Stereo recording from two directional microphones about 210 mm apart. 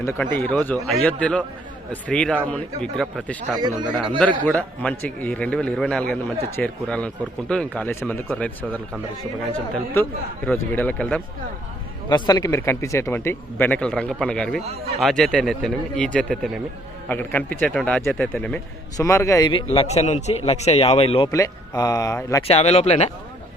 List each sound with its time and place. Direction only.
0.0 s a man's voice: 10° left (ahead or behind)
3.6 s a man's voice: 20° right (ahead or behind)
4.4 s a man's voice: 5° left (ahead or behind)
12.0 s speech: 20° left (ahead or behind); by 14.6 s 5° left (ahead or behind)
14.6 s a man's voice: 30° right (ahead or behind)
15.0 s a man's voice: centre (ahead or behind); by 21.2 s 25° left (ahead or behind)
21.2 s speech: 15° left (ahead or behind)
22.4 s speech: 30° left (ahead or behind)